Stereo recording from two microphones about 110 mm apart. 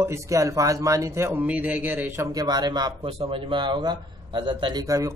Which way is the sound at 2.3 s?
40° right (ahead or behind).